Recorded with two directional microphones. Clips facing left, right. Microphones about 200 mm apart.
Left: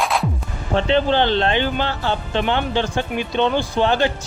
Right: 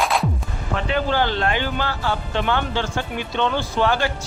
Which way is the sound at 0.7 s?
25° left (ahead or behind).